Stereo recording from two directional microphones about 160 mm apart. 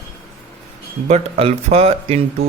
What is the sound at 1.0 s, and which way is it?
Speech, 40° right (ahead or behind).